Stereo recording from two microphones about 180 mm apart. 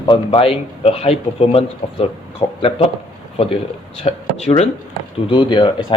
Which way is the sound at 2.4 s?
15° left (ahead or behind).